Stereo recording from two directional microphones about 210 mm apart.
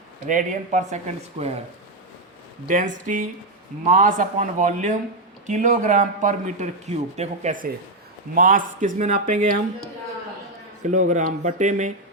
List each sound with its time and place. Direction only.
0.3 s a man's voice: 35° right (ahead or behind)
2.6 s a man's voice: 40° right (ahead or behind)
10.8 s a man's voice: 35° right (ahead or behind)